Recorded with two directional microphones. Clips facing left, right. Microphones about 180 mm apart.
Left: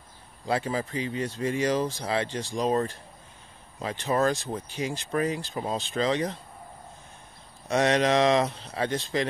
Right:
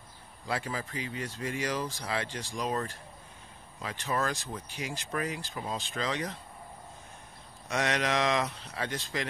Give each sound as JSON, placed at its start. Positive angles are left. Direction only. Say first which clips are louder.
{"t": 0.5, "sound": "speech", "louder": "left 7 dB", "side_deg": 25}
{"t": 7.6, "sound": "speech", "louder": "left 7 dB", "side_deg": 30}